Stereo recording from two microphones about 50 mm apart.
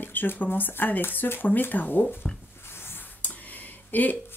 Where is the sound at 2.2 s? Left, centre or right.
Left.